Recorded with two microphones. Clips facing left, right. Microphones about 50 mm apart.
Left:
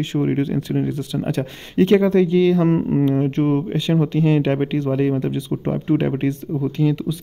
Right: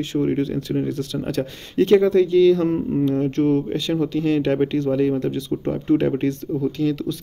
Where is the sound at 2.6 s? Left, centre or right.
Left.